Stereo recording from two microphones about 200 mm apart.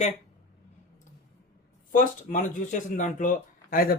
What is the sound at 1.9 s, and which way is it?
Speech, 40° left (ahead or behind).